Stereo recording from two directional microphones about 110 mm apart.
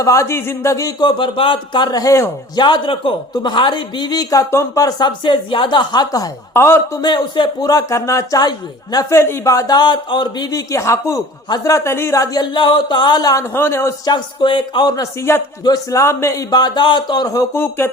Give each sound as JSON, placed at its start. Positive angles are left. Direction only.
{"t": 0.0, "sound": "speech", "side_deg": 30}
{"t": 2.6, "sound": "speech", "side_deg": 45}
{"t": 7.0, "sound": "speech", "side_deg": 45}
{"t": 12.5, "sound": "speech", "side_deg": 45}
{"t": 13.5, "sound": "speech", "side_deg": 20}
{"t": 14.0, "sound": "speech", "side_deg": 45}
{"t": 15.3, "sound": "speech", "side_deg": 25}
{"t": 16.5, "sound": "speech", "side_deg": 40}
{"t": 17.6, "sound": "speech", "side_deg": 20}